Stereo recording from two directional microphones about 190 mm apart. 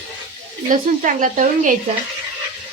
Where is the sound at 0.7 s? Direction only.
45° right (ahead or behind).